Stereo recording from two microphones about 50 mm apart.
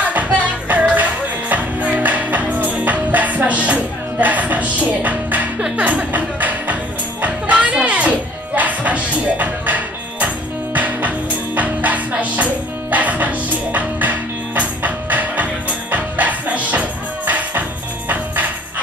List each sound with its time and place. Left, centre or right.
0.0 s music: right